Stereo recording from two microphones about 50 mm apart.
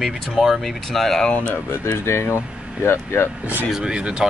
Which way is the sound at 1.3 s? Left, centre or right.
Left.